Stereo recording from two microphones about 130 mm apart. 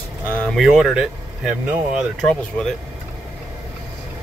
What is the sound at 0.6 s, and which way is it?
Speech, 5° right (ahead or behind).